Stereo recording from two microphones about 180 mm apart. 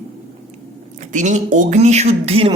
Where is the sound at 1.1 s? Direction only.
45° right (ahead or behind).